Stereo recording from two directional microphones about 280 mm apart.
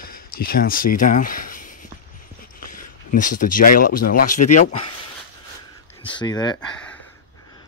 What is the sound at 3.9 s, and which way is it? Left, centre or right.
Speech, left.